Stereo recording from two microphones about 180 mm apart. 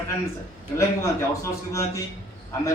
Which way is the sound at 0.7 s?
15° left (ahead or behind).